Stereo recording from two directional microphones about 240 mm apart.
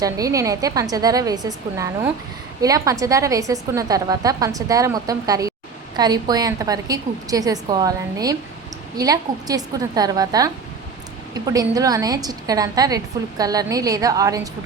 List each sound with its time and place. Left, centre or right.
0.0 s a woman's voice: centre